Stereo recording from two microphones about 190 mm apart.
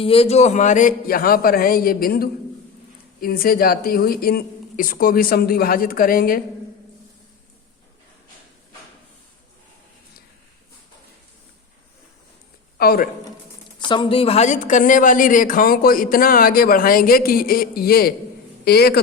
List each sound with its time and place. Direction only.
0.0 s speech: 30° left (ahead or behind); by 6.4 s 50° left (ahead or behind)
12.7 s speech: 50° left (ahead or behind)
13.8 s a man's voice: 25° left (ahead or behind); by 18.9 s 55° left (ahead or behind)